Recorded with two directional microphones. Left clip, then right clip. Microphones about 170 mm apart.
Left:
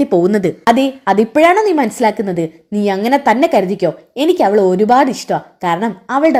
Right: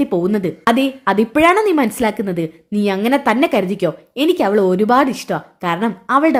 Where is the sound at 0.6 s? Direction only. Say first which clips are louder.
Left 2 dB; centre (ahead or behind).